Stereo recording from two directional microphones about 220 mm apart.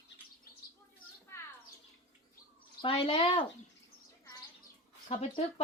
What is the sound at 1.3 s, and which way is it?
Bird, 10° left (ahead or behind).